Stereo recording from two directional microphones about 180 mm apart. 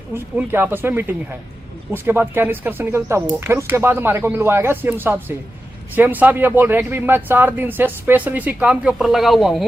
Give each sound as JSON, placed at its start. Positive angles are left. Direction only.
{"t": 0.1, "sound": "speech", "side_deg": -10}